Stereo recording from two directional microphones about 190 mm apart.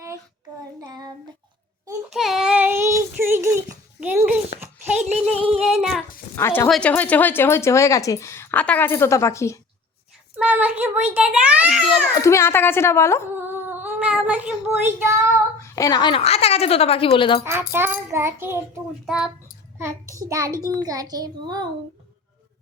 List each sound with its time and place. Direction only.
0.8 s child singing: 20° right (ahead or behind)
2.0 s child singing: centre (ahead or behind)
4.6 s a sound: 5° right (ahead or behind)
5.5 s female singing: centre (ahead or behind)
6.3 s speech: 10° left (ahead or behind)
10.3 s a sound: 10° right (ahead or behind)
11.1 s a child's voice: 5° right (ahead or behind)
11.9 s a child's voice: 15° left (ahead or behind)
13.3 s child singing: 10° right (ahead or behind)
15.6 s speech: 15° left (ahead or behind)
17.4 s a sound: 10° right (ahead or behind)
19.0 s a child's voice: 5° right (ahead or behind)
19.8 s a sound: 15° right (ahead or behind)
20.7 s a child's voice: 20° right (ahead or behind)